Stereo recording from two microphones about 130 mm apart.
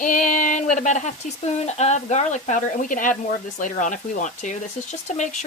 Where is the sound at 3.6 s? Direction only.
75° left (ahead or behind).